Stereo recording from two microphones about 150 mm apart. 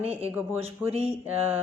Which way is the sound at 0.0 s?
40° right (ahead or behind).